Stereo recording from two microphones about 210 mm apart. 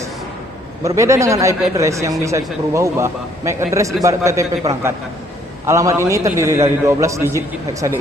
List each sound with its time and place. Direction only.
0.9 s a man's voice: 15° right (ahead or behind)